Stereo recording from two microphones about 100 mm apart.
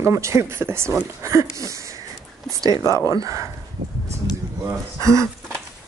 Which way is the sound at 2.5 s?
35° right (ahead or behind).